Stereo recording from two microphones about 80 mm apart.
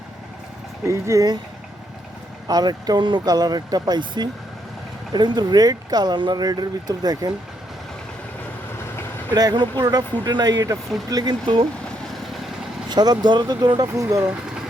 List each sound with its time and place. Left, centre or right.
0.9 s speech: right
2.5 s speech: right
9.3 s speech: right
12.9 s speech: right
13.8 s speech: right